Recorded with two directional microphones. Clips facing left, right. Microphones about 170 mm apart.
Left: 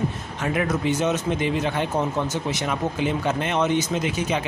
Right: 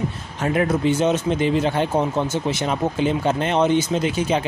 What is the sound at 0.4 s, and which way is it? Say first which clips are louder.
Speech: right 4 dB; 35° right (ahead or behind).